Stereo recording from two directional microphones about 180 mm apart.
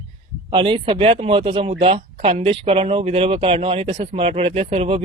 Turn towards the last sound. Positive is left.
turn(degrees=-35)  # may be behind; listen again after turning